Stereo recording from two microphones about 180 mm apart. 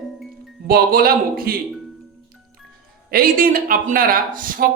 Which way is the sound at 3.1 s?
55° right (ahead or behind).